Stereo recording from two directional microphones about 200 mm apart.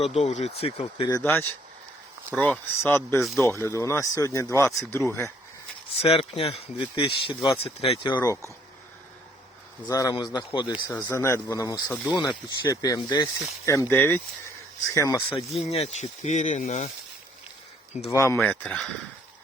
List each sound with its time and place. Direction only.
0.0 s speech: 30° left (ahead or behind)
1.2 s speech: 10° left (ahead or behind)
6.0 s speech: 30° left (ahead or behind)
9.8 s speech: 15° left (ahead or behind)
15.5 s speech: 30° left (ahead or behind)
18.1 s speech: 15° left (ahead or behind)
18.3 s speech: centre (ahead or behind)